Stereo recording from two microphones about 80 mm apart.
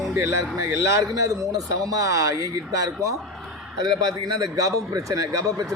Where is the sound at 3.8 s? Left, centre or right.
Right.